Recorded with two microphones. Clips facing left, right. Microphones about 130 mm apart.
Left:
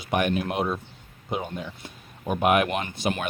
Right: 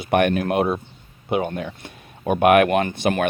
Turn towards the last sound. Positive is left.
turn(degrees=-55)  # may be behind; listen again after turning